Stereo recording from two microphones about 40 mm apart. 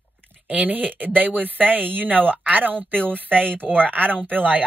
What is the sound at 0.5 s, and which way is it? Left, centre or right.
Speech, right.